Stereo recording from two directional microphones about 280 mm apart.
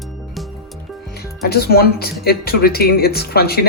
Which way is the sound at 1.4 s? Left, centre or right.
Left.